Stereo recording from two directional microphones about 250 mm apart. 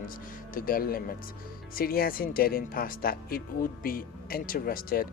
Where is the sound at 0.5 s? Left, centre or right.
Left.